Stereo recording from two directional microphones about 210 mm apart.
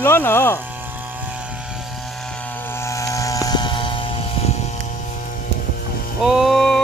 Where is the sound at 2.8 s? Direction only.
15° left (ahead or behind).